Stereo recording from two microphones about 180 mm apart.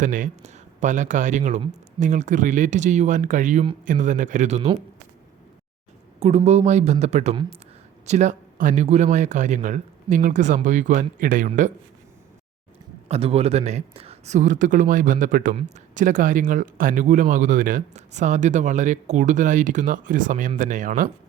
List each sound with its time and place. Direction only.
0.0 s speech: 45° right (ahead or behind)
6.1 s a woman's voice: 35° right (ahead or behind)
13.1 s speech: 35° right (ahead or behind)